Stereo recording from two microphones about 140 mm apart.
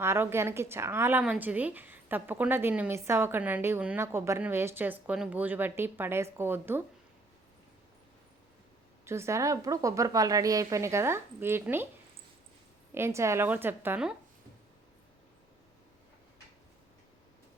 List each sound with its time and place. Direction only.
0.0 s a woman's voice: 15° right (ahead or behind)
9.0 s a woman's voice: 20° right (ahead or behind)
12.9 s a woman's voice: 20° right (ahead or behind)